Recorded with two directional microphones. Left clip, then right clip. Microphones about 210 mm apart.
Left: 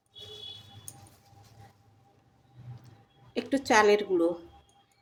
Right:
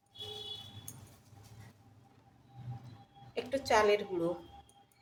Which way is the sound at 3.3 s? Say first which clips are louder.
Left 5 dB; 40° left (ahead or behind).